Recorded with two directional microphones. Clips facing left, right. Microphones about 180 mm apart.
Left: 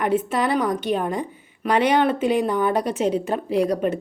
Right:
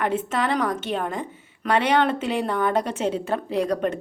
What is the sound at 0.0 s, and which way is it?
Speech, 10° left (ahead or behind).